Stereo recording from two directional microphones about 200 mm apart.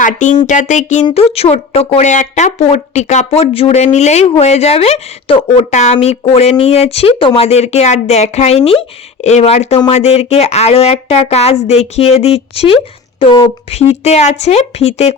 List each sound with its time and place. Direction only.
0.0 s speech: 40° left (ahead or behind)